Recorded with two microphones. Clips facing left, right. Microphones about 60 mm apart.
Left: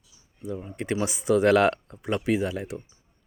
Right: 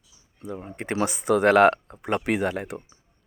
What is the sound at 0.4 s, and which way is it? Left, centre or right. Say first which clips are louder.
Speech: left 1 dB; right.